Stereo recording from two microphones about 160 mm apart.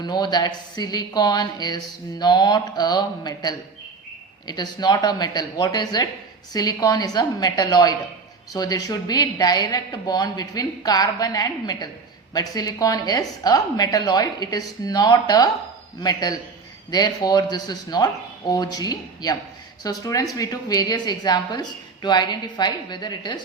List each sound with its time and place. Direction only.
0.0 s a woman's voice: 25° left (ahead or behind)